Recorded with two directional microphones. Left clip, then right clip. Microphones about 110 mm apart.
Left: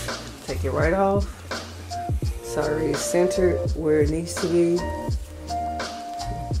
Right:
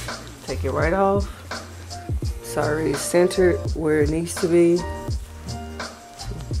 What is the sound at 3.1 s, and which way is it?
Speech, 30° right (ahead or behind).